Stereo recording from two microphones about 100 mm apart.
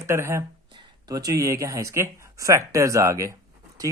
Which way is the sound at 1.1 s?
40° right (ahead or behind).